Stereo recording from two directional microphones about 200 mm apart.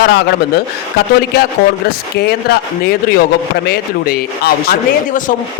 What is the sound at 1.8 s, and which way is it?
A man's voice, 50° left (ahead or behind).